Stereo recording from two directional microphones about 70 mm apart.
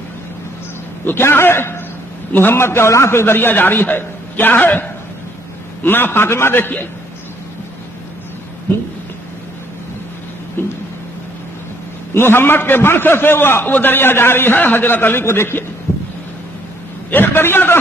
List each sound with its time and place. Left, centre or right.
1.0 s a man's voice: left
5.9 s a man's voice: left
10.6 s a sound: left
12.1 s a man's voice: left
17.1 s a man's voice: left